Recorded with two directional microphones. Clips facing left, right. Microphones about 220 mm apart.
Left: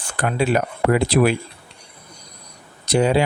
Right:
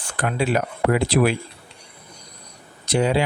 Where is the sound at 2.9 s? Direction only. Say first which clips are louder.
Left 3 dB; 45° left (ahead or behind).